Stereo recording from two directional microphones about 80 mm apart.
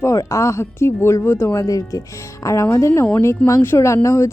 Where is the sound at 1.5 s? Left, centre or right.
Left.